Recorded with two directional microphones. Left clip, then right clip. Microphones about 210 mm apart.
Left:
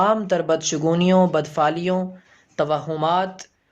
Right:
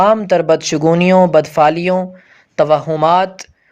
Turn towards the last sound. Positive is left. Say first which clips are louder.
# right 9 dB
turn(degrees=-35)  # may be behind; listen again after turning